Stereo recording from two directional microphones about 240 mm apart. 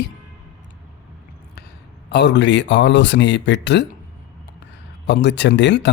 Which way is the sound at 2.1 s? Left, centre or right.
Left.